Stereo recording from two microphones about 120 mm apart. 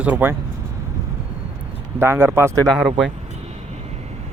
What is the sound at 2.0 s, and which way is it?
Speech, 20° right (ahead or behind).